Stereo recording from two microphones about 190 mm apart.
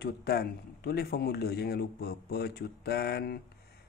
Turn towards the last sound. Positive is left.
turn(degrees=55)  # may be behind; listen again after turning